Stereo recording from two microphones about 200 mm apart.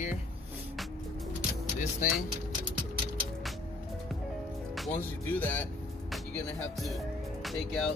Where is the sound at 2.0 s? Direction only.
40° left (ahead or behind).